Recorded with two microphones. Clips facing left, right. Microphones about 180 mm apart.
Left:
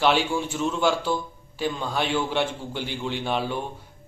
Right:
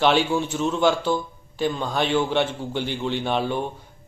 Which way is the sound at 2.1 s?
45° right (ahead or behind).